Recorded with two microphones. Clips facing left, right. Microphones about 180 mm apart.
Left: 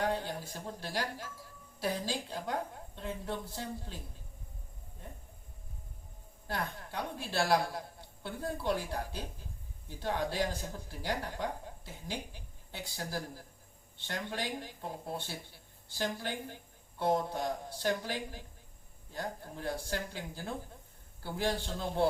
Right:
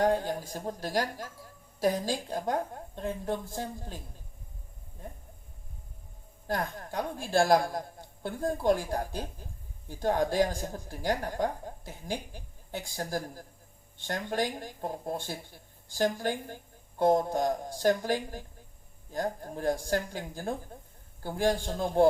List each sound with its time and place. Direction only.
0.0 s speech: 45° right (ahead or behind)
6.5 s speech: 45° right (ahead or behind)